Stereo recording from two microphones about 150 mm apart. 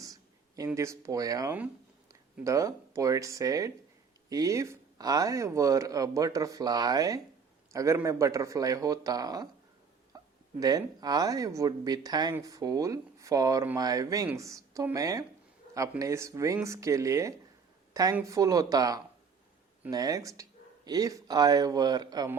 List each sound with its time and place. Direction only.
0.0 s speech: 25° right (ahead or behind)
10.6 s speech: 25° right (ahead or behind)